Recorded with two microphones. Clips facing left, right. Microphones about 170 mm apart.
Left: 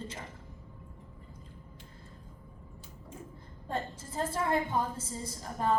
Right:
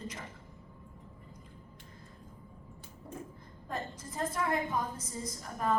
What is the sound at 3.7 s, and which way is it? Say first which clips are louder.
A woman's voice: left 3 dB; 30° left (ahead or behind).